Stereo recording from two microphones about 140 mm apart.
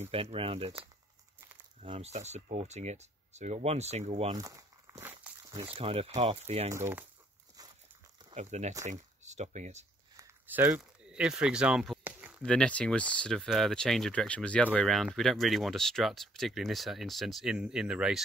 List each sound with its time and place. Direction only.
0.0 s speech: 45° right (ahead or behind)
1.9 s speech: 50° right (ahead or behind)
4.3 s crumpling: 25° right (ahead or behind)
5.4 s a sound: 25° right (ahead or behind)
5.8 s speech: 45° right (ahead or behind)
6.7 s speech: 15° right (ahead or behind)
8.4 s speech: 55° right (ahead or behind)
10.1 s a sound: 15° right (ahead or behind)
10.8 s speech: 5° right (ahead or behind)
12.0 s a sound: 10° right (ahead or behind)
12.4 s speech: 5° left (ahead or behind)